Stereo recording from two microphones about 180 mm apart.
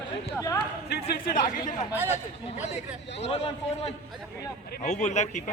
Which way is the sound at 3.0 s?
75° left (ahead or behind).